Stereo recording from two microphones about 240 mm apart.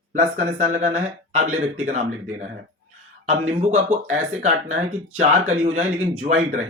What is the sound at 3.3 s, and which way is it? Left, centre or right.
Speech, right.